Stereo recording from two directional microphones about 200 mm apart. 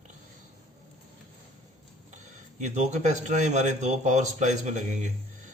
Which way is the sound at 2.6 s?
35° right (ahead or behind).